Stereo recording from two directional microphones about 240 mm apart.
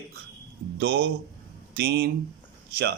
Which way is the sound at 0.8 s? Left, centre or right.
Right.